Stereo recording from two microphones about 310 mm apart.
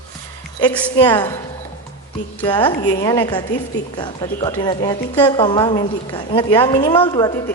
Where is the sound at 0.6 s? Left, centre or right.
Centre.